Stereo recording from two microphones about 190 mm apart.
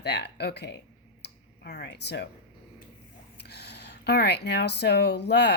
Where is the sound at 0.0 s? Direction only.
60° left (ahead or behind).